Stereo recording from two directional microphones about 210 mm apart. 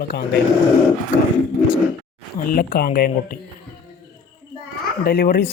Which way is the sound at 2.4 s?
45° left (ahead or behind).